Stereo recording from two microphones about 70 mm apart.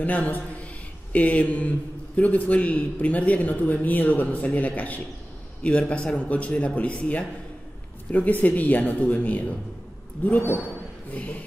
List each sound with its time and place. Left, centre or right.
0.0 s a man's voice: left